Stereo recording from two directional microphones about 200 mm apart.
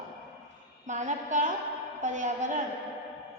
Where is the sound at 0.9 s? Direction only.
35° right (ahead or behind).